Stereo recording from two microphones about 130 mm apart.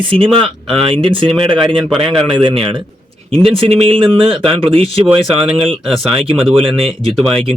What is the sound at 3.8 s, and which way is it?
Speech, 45° right (ahead or behind).